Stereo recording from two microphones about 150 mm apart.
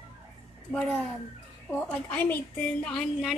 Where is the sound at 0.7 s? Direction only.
5° left (ahead or behind).